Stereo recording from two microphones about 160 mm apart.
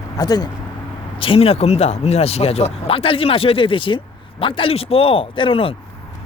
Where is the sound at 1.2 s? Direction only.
35° left (ahead or behind).